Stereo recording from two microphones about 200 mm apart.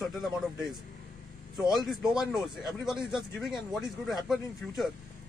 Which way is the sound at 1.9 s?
Centre (ahead or behind).